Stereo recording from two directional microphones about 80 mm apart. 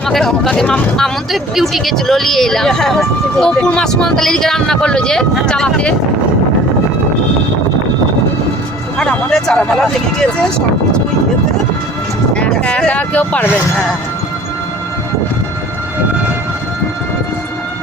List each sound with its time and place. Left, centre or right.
0.0 s speech: centre
9.0 s speech: centre
12.3 s speech: centre